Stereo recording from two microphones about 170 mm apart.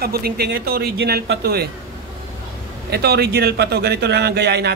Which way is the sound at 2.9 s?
70° right (ahead or behind).